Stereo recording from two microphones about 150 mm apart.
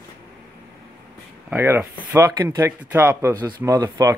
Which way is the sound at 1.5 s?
15° right (ahead or behind).